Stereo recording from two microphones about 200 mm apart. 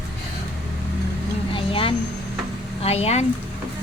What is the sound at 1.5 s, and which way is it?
Vehicle, 25° left (ahead or behind).